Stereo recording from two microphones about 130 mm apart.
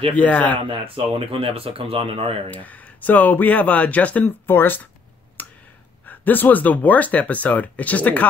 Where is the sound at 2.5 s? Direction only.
10° left (ahead or behind).